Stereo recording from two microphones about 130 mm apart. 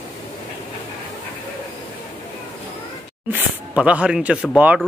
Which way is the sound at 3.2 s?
15° right (ahead or behind).